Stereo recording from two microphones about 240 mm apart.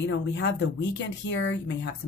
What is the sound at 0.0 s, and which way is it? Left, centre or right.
A woman's voice, left.